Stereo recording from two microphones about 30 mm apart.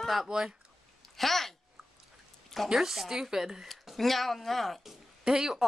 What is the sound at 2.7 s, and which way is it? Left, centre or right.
Speech, centre.